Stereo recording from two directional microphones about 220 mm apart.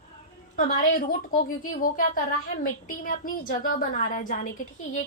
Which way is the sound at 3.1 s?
40° left (ahead or behind).